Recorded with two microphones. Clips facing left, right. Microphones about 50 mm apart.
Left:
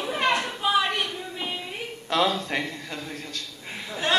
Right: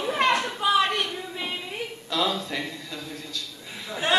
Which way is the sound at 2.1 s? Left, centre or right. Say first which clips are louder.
Left 3 dB; left.